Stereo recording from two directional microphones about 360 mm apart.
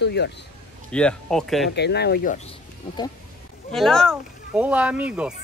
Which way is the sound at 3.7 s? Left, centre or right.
Centre.